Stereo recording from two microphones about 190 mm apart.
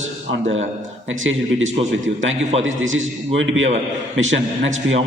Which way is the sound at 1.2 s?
90° right.